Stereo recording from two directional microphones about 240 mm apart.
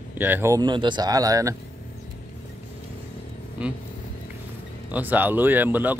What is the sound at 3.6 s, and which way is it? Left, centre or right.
Speech, centre.